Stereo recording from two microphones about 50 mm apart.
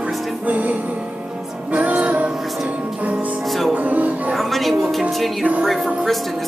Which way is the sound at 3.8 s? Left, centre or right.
Right.